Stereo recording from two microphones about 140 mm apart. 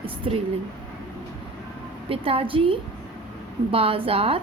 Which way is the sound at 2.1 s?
40° right (ahead or behind).